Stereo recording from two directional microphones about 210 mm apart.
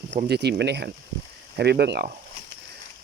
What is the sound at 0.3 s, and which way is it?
Speech, 50° right (ahead or behind).